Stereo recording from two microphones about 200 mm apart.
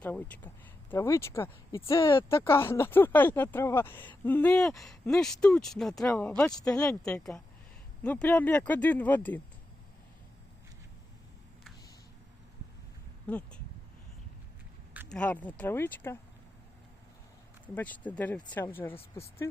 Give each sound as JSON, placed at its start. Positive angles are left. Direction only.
{"t": 0.0, "sound": "speech", "side_deg": 10}
{"t": 13.2, "sound": "speech", "side_deg": 5}
{"t": 15.1, "sound": "speech", "side_deg": 5}
{"t": 17.7, "sound": "speech", "side_deg": 10}